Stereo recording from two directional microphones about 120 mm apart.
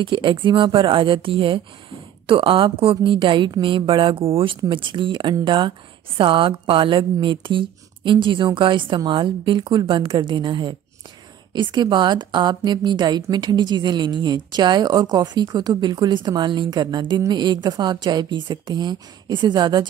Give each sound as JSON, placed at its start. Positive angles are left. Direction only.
{"t": 0.0, "sound": "a woman's voice", "side_deg": -45}